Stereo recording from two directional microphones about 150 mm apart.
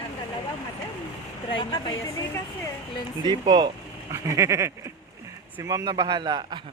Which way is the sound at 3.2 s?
30° right (ahead or behind).